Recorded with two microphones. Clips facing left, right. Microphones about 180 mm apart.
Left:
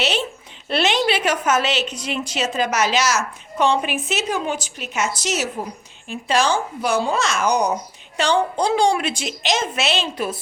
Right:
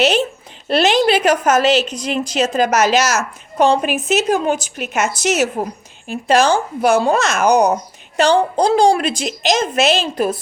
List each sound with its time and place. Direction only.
0.0 s a woman's voice: 45° right (ahead or behind)
6.1 s a woman's voice: 45° right (ahead or behind)
6.8 s a woman's voice: 55° right (ahead or behind)